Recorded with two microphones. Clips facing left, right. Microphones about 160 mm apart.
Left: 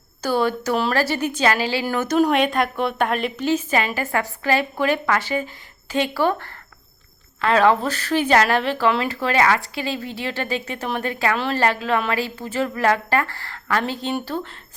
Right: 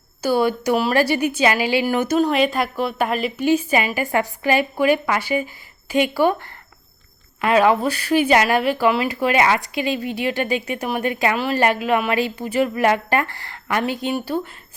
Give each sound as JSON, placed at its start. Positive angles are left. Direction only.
{"t": 0.2, "sound": "speech", "side_deg": -10}
{"t": 2.1, "sound": "speech", "side_deg": 0}